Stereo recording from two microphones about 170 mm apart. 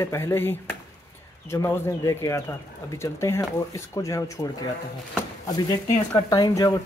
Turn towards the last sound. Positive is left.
turn(degrees=20)  # may be behind; listen again after turning